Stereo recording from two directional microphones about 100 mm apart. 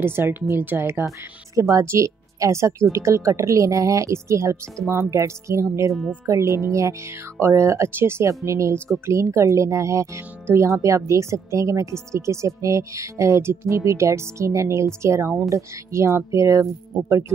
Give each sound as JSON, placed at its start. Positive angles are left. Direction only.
{"t": 0.0, "sound": "speech", "side_deg": -20}
{"t": 1.5, "sound": "speech", "side_deg": -30}